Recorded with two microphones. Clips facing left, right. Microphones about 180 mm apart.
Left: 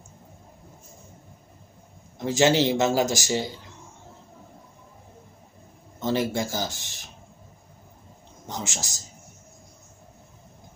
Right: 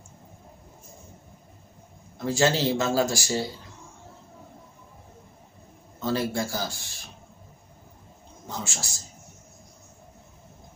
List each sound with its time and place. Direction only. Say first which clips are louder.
2.1 s speech: left 3 dB; 20° left (ahead or behind)
5.9 s speech: left 2 dB; 20° left (ahead or behind)
8.5 s a man's voice: left 1 dB; 20° left (ahead or behind)